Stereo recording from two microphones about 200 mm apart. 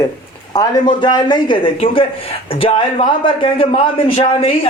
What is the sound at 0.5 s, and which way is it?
A man's voice, 20° left (ahead or behind).